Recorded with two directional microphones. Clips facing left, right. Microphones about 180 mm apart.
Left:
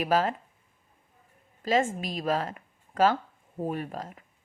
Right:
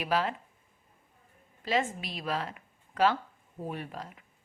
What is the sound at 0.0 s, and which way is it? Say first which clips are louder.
Speech: left 4 dB; 45° left (ahead or behind).